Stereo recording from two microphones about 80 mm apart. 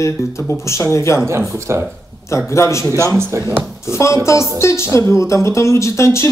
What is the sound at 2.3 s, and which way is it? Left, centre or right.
Speech, left.